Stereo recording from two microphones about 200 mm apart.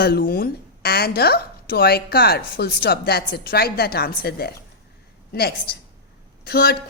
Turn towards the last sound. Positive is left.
turn(degrees=50)  # may be behind; listen again after turning